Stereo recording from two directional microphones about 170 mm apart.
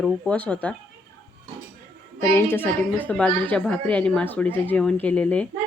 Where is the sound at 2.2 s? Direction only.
15° left (ahead or behind).